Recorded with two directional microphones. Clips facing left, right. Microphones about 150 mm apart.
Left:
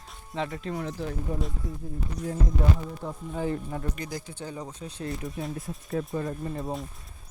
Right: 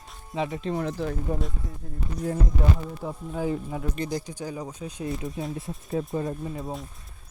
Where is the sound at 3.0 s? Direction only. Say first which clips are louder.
Right 2 dB; 10° right (ahead or behind).